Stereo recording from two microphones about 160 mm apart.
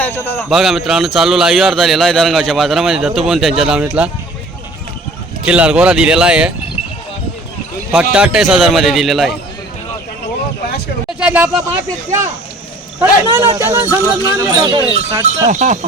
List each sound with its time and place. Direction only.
0.5 s a man's voice: centre (ahead or behind)
5.5 s a man's voice: 5° right (ahead or behind)
7.9 s a man's voice: 5° right (ahead or behind)
11.2 s speech: 10° right (ahead or behind)
13.0 s speech: 15° right (ahead or behind)
15.4 s speech: 50° right (ahead or behind)